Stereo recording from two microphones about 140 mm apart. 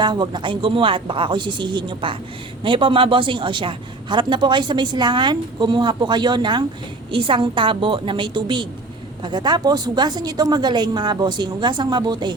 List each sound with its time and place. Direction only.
0.0 s a woman's voice: 30° right (ahead or behind)